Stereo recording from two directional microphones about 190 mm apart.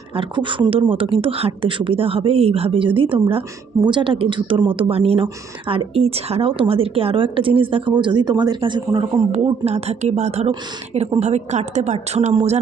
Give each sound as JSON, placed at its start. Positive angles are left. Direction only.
{"t": 0.2, "sound": "speech", "side_deg": -25}
{"t": 9.3, "sound": "a woman's voice", "side_deg": -35}